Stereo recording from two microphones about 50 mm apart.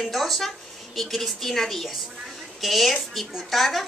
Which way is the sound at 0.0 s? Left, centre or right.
Centre.